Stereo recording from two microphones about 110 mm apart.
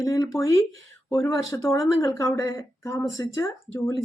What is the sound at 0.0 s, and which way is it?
Speech, 30° left (ahead or behind).